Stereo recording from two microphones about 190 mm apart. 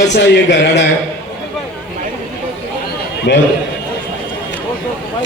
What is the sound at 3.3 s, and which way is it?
Speech, 65° left (ahead or behind).